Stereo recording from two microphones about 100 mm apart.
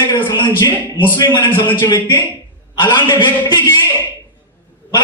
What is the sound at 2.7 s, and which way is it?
Speech, 50° left (ahead or behind).